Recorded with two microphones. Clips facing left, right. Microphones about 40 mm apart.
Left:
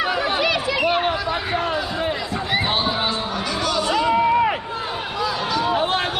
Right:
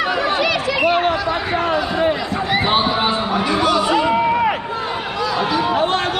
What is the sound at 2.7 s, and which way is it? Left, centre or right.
Music, centre.